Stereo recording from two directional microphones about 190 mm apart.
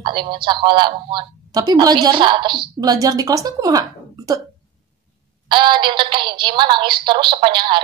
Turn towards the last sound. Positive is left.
turn(degrees=-25)  # may be behind; listen again after turning